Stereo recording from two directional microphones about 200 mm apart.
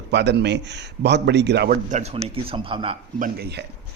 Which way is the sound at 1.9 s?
35° right (ahead or behind).